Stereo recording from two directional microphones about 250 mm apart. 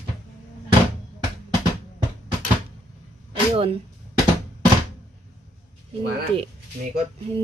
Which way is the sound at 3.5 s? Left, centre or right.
Right.